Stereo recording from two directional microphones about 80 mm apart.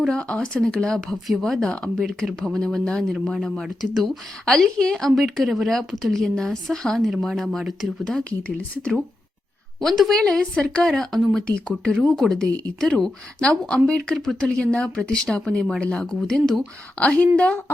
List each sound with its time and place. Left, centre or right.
0.1 s a woman's voice: centre
8.0 s a woman's voice: centre